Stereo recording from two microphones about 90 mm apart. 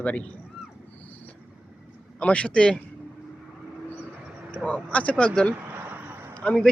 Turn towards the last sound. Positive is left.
turn(degrees=10)  # may be behind; listen again after turning